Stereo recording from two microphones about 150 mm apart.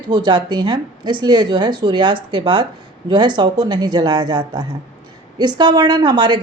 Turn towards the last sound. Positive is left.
turn(degrees=-30)  # may be behind; listen again after turning